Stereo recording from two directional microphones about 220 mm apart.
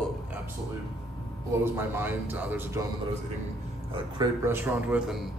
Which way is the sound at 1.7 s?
10° right (ahead or behind).